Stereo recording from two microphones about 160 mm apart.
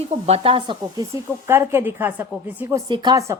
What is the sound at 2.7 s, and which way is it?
Speech, 25° right (ahead or behind).